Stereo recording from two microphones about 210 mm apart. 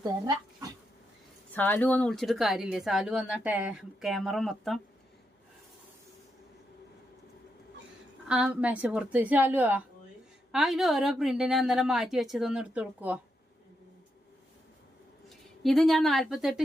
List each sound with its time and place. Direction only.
0.0 s speech: 20° right (ahead or behind)
1.5 s speech: 10° left (ahead or behind)
8.3 s a woman's voice: 5° right (ahead or behind)
15.3 s a woman's voice: centre (ahead or behind)